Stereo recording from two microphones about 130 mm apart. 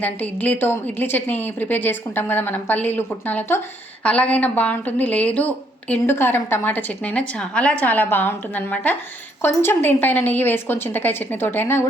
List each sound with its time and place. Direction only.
0.0 s a woman's voice: 10° left (ahead or behind)